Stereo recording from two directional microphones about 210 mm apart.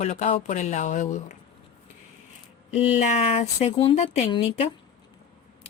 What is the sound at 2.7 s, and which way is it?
A woman's voice, 30° left (ahead or behind).